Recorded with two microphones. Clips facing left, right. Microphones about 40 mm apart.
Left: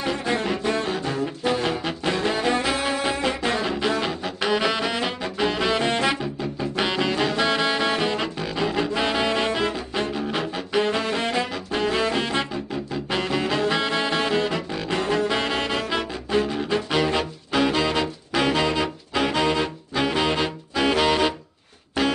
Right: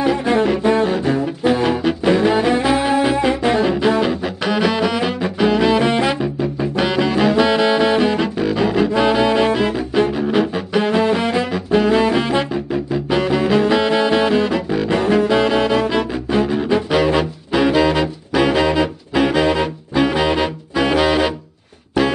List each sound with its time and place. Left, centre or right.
0.2 s saxophone: centre
1.4 s music: centre
6.8 s saxophone: centre
10.1 s music: centre
10.9 s saxophone: centre
12.9 s music: centre
14.9 s saxophone: centre
15.9 s music: centre
16.7 s brass instrument: centre